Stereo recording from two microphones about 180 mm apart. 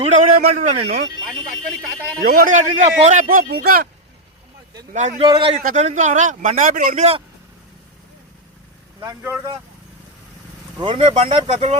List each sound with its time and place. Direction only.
0.3 s a man's voice: 40° right (ahead or behind)
1.3 s speech: 5° left (ahead or behind)
2.2 s a man's voice: 55° right (ahead or behind)
4.9 s a man's voice: 40° right (ahead or behind)
5.2 s speech: 30° right (ahead or behind)
5.6 s a man's voice: 40° right (ahead or behind)
9.0 s speech: 10° right (ahead or behind)
10.8 s speech: 30° right (ahead or behind)